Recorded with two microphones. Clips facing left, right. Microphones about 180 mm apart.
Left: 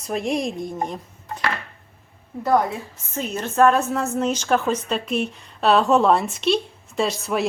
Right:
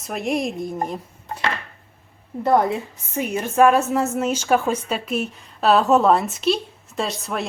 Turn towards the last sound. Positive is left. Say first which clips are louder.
# left 3 dB
turn(degrees=0)  # may be behind; listen again after turning